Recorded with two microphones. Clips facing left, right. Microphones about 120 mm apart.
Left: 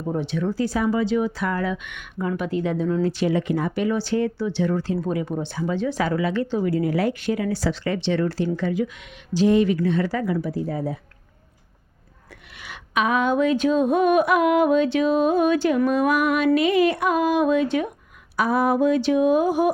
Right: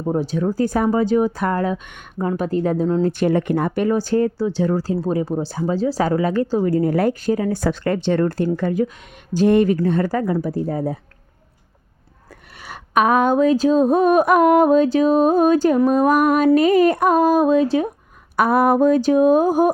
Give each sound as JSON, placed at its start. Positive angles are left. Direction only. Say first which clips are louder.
{"t": 0.1, "sound": "speech", "louder": "right 4 dB", "side_deg": -40}
{"t": 3.1, "sound": "speech", "louder": "right 4 dB", "side_deg": -50}
{"t": 7.6, "sound": "speech", "louder": "right 4 dB", "side_deg": -50}
{"t": 12.6, "sound": "speech", "louder": "right 6 dB", "side_deg": -45}
{"t": 18.3, "sound": "speech", "louder": "right 5 dB", "side_deg": -55}